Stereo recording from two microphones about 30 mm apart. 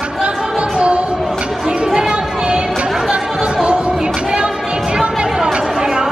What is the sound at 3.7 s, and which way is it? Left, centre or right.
Music, right.